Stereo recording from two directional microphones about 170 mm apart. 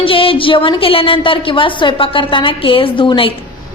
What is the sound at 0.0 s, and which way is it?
A woman's voice, 30° left (ahead or behind).